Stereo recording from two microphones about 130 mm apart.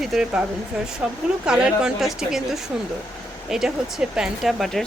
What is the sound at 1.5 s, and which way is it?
Speech, 5° right (ahead or behind).